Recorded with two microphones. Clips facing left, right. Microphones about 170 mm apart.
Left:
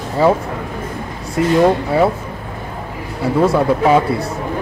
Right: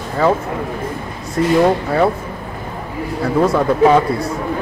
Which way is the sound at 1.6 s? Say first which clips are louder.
Left 1 dB; 5° left (ahead or behind).